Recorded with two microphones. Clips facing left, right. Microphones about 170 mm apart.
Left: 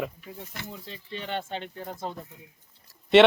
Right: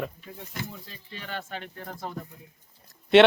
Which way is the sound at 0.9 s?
25° left (ahead or behind).